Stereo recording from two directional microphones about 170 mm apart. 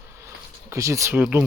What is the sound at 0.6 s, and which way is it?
Speech, 15° right (ahead or behind).